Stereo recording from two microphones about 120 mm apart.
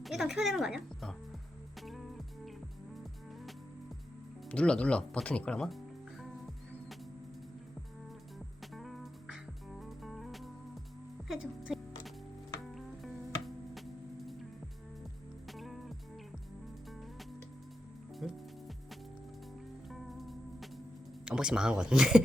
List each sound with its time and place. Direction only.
0.0 s speech: centre (ahead or behind)
1.8 s music: centre (ahead or behind)
4.4 s speech: 10° left (ahead or behind)
8.7 s music: centre (ahead or behind)
15.4 s music: centre (ahead or behind)
18.2 s music: 5° right (ahead or behind)
19.9 s music: centre (ahead or behind)
21.2 s speech: 5° right (ahead or behind)